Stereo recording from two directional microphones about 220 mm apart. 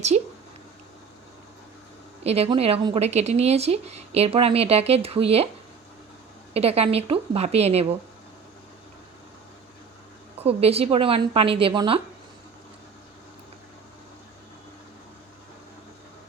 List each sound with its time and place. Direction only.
0.1 s speech: 30° right (ahead or behind)
2.2 s speech: 30° right (ahead or behind)
6.5 s speech: 25° right (ahead or behind)
10.4 s speech: 25° right (ahead or behind)